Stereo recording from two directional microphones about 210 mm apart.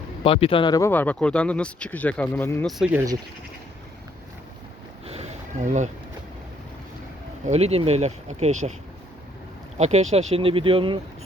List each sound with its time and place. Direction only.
0.2 s speech: 25° left (ahead or behind); by 3.0 s 5° right (ahead or behind)
5.0 s a sound: 30° right (ahead or behind)
7.4 s speech: 30° right (ahead or behind)
9.7 s speech: 30° right (ahead or behind)